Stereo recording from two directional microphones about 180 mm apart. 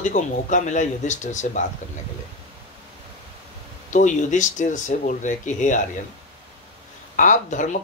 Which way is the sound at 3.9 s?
45° left (ahead or behind).